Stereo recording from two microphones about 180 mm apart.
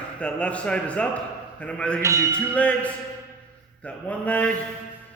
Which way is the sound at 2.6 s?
10° left (ahead or behind).